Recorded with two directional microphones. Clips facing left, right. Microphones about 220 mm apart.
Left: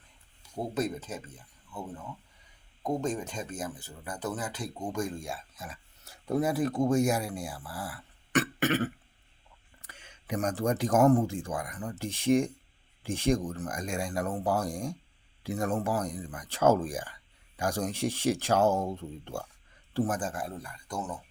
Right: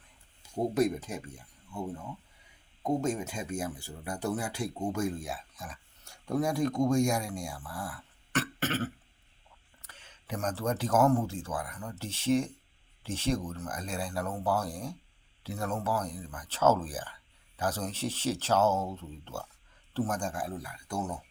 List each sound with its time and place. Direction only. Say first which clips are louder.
0.7 s speech: right 3 dB; 10° right (ahead or behind)
2.8 s speech: right 1 dB; 10° right (ahead or behind)
8.3 s a sound: left 5 dB; 15° left (ahead or behind)
9.8 s speech: left 3 dB; 15° left (ahead or behind); by 21.2 s 10° right (ahead or behind)